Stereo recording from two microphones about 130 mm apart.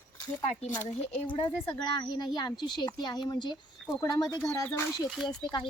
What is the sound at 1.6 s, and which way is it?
A woman's voice, 40° left (ahead or behind).